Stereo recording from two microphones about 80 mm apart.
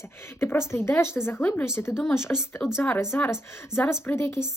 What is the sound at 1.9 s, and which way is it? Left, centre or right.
Speech, centre.